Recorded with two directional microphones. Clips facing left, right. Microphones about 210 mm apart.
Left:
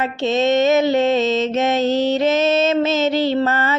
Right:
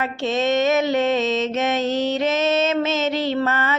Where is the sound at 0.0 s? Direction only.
25° left (ahead or behind).